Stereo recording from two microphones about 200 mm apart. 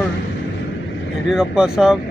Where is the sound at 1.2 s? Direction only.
5° right (ahead or behind).